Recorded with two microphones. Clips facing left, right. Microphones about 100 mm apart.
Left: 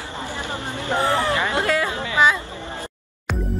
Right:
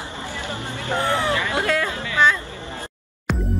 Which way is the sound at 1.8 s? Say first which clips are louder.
Left 2 dB; 25° left (ahead or behind).